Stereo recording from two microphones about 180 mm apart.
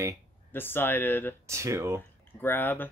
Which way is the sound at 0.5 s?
10° left (ahead or behind).